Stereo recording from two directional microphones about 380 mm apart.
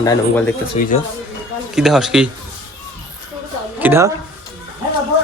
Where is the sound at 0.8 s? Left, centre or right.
Centre.